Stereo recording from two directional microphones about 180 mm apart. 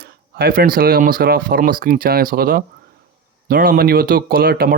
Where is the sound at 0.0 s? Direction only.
60° right (ahead or behind).